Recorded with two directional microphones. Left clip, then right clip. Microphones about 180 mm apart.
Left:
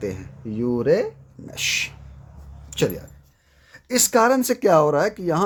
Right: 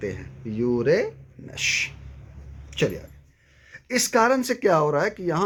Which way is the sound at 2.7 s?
60° left (ahead or behind).